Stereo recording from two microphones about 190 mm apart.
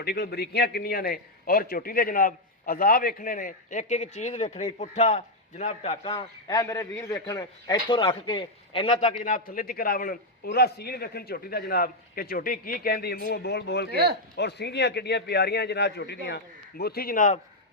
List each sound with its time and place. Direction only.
0.0 s a man's voice: 55° left (ahead or behind); by 9.1 s 30° left (ahead or behind)
9.2 s a man's voice: 50° left (ahead or behind)
13.9 s speech: 55° right (ahead or behind)
14.3 s a man's voice: 60° left (ahead or behind); by 17.3 s 45° left (ahead or behind)